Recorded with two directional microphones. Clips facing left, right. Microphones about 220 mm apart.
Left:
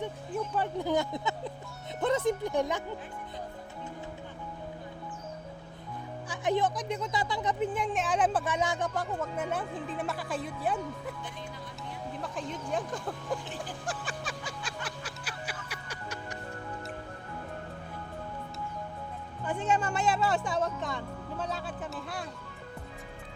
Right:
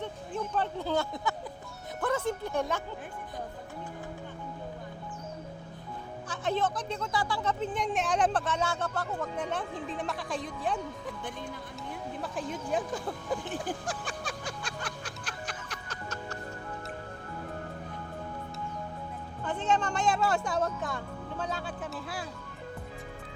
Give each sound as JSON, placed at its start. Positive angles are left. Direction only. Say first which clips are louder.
{"t": 0.0, "sound": "speech", "louder": "left 1 dB", "side_deg": 10}
{"t": 6.2, "sound": "speech", "louder": "left 2 dB", "side_deg": 15}
{"t": 12.2, "sound": "speech", "louder": "right 2 dB", "side_deg": -5}
{"t": 13.8, "sound": "music", "louder": "right 1 dB", "side_deg": 0}
{"t": 19.5, "sound": "speech", "louder": "even", "side_deg": 10}